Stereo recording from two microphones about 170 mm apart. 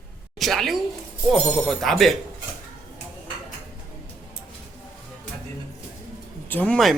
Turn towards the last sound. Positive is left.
turn(degrees=5)  # may be behind; listen again after turning